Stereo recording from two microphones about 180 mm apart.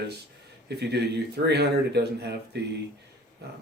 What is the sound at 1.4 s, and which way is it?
Speech, 65° right (ahead or behind).